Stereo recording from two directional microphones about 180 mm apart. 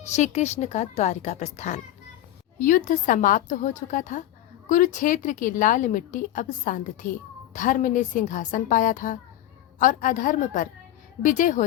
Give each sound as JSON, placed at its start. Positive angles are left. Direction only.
{"t": 0.0, "sound": "a woman's voice", "side_deg": 40}